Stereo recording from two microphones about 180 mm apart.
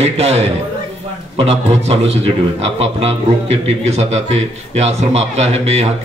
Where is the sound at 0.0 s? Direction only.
35° right (ahead or behind).